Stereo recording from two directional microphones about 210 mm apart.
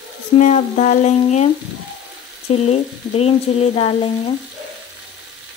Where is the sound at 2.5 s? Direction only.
30° left (ahead or behind).